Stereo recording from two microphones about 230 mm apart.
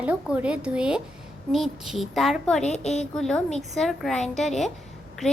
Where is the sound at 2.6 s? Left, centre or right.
Left.